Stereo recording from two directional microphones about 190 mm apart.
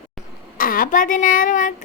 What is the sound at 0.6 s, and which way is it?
A child's voice, 50° left (ahead or behind).